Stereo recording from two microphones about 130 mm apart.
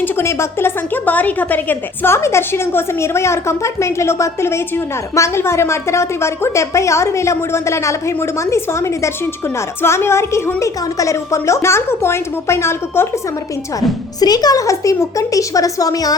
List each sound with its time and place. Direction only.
0.0 s a woman's voice: 20° left (ahead or behind)
14.2 s a woman's voice: 30° left (ahead or behind)